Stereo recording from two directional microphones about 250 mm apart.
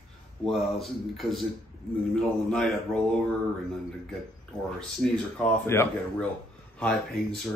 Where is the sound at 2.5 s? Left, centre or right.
Centre.